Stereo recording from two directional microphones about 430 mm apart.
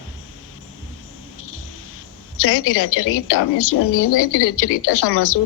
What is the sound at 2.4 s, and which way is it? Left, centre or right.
A woman's voice, left.